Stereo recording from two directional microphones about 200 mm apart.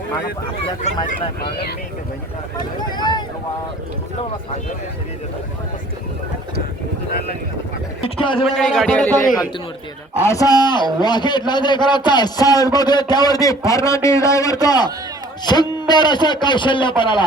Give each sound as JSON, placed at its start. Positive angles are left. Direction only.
{"t": 1.0, "sound": "speech", "side_deg": 45}
{"t": 2.8, "sound": "a man's voice", "side_deg": 20}
{"t": 8.0, "sound": "a man's voice", "side_deg": 25}
{"t": 8.4, "sound": "a man's voice", "side_deg": 0}
{"t": 10.2, "sound": "a man's voice", "side_deg": 15}